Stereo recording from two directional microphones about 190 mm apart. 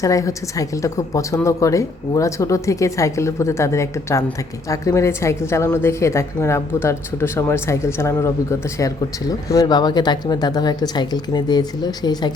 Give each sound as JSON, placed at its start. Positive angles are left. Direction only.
{"t": 0.0, "sound": "a woman's voice", "side_deg": 15}